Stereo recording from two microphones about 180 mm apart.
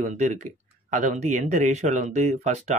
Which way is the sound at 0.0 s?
40° right (ahead or behind).